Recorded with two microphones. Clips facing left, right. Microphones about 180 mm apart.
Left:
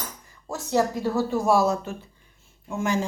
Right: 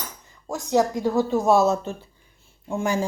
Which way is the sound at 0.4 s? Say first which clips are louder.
Right 2 dB; 15° right (ahead or behind).